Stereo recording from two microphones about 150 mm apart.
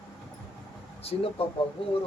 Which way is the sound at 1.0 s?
40° left (ahead or behind).